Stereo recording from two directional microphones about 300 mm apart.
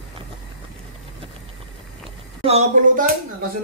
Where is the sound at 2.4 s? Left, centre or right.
Right.